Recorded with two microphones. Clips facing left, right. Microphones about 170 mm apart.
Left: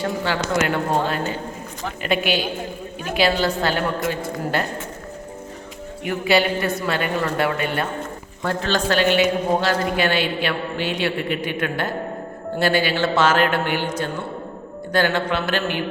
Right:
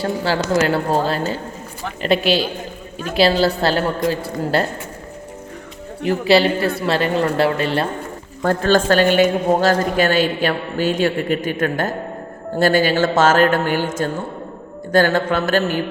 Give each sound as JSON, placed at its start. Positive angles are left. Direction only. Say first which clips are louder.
{"t": 0.0, "sound": "a woman's voice", "louder": "right 3 dB", "side_deg": -35}
{"t": 6.0, "sound": "a woman's voice", "louder": "right 5 dB", "side_deg": -30}
{"t": 8.4, "sound": "a man's voice", "louder": "right 7 dB", "side_deg": -45}